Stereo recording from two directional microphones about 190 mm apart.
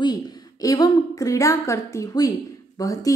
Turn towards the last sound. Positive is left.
turn(degrees=15)  # may be behind; listen again after turning